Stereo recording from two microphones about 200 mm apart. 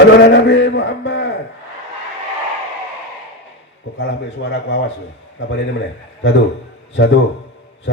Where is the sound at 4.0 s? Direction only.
60° left (ahead or behind).